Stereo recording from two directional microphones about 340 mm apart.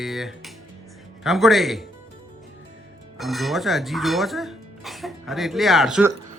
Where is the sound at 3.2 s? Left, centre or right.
Centre.